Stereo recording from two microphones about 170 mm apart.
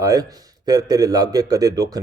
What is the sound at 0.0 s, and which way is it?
A man's voice, 20° right (ahead or behind).